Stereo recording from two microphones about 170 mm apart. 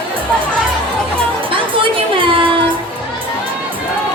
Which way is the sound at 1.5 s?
30° right (ahead or behind).